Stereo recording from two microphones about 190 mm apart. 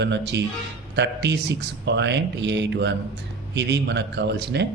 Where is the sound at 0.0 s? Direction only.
65° right (ahead or behind).